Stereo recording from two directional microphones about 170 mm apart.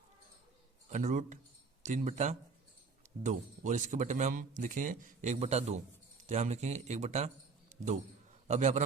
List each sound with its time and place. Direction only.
0.9 s speech: 45° right (ahead or behind)
8.4 s speech: 45° right (ahead or behind)